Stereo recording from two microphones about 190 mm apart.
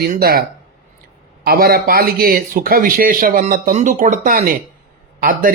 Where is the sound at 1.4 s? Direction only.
50° right (ahead or behind).